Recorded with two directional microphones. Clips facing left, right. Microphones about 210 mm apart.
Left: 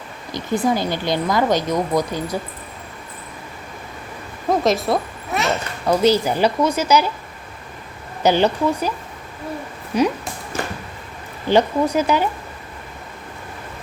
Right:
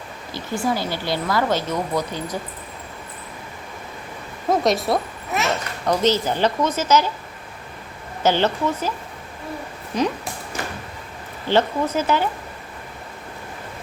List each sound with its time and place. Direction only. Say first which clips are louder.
0.3 s speech: left 4 dB; 20° left (ahead or behind)
4.4 s a child's voice: left 1 dB; centre (ahead or behind)
8.2 s speech: left 3 dB; 15° left (ahead or behind)
9.9 s speech: left 4 dB; 10° left (ahead or behind)
11.4 s speech: left 3 dB; 15° left (ahead or behind)